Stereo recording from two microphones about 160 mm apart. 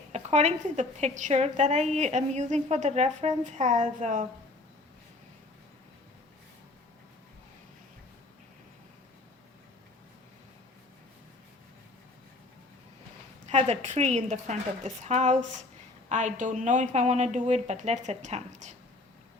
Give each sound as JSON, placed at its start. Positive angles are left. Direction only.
{"t": 0.1, "sound": "a woman's voice", "side_deg": -45}
{"t": 13.5, "sound": "a woman's voice", "side_deg": -45}